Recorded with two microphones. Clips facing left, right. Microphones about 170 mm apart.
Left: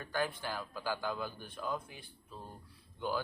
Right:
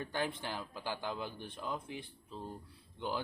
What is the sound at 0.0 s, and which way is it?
Speech, 20° right (ahead or behind).